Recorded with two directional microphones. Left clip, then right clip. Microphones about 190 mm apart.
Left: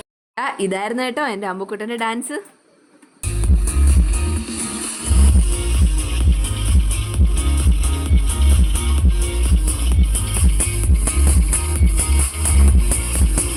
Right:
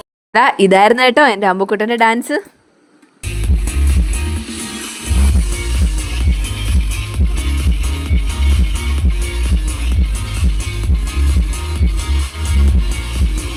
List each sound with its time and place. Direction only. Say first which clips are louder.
0.3 s speech: right 13 dB; 40° right (ahead or behind)
4.4 s music: right 2 dB; 15° right (ahead or behind)
8.4 s music: right 2 dB; 20° right (ahead or behind)